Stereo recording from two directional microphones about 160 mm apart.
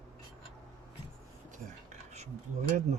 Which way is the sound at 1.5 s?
45° right (ahead or behind).